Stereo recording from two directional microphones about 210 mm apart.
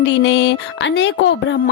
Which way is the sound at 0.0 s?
55° left (ahead or behind).